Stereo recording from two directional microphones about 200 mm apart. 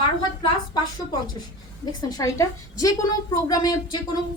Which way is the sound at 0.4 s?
20° left (ahead or behind).